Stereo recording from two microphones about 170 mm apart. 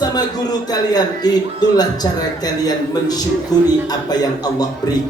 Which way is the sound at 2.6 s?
25° left (ahead or behind).